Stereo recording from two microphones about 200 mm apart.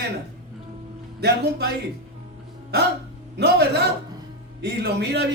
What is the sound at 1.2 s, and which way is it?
Speech, 55° right (ahead or behind).